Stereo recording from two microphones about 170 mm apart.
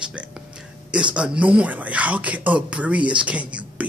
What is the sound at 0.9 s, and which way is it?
Speech, 5° right (ahead or behind).